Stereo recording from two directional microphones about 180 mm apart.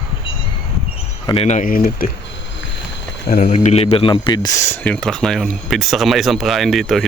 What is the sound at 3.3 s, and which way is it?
Speech, 50° left (ahead or behind).